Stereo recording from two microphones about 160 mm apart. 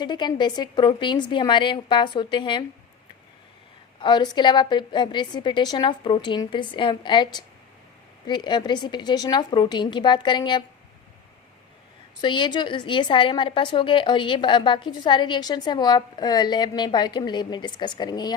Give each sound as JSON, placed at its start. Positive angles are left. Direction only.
{"t": 0.0, "sound": "a woman's voice", "side_deg": 25}
{"t": 4.0, "sound": "a woman's voice", "side_deg": 30}
{"t": 12.2, "sound": "a woman's voice", "side_deg": 30}